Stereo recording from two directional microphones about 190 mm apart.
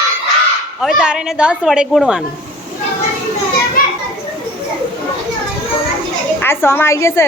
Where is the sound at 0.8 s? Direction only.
5° right (ahead or behind).